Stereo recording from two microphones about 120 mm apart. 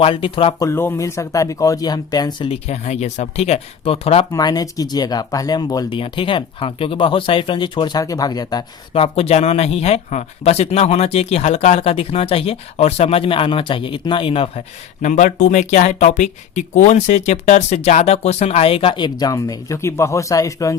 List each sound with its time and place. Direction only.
0.0 s speech: 50° left (ahead or behind)
0.6 s speech: 20° left (ahead or behind)
2.5 s speech: 65° left (ahead or behind)
4.3 s speech: 30° left (ahead or behind)
5.9 s speech: 45° left (ahead or behind)
8.9 s speech: 55° left (ahead or behind)
15.0 s speech: 90° left; by 20.7 s 30° left (ahead or behind)